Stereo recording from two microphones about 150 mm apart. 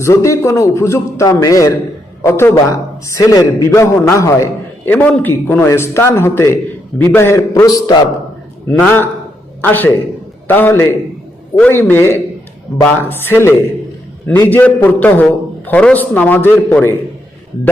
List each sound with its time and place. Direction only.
0.0 s a man's voice: 20° left (ahead or behind)
8.6 s a man's voice: 10° left (ahead or behind)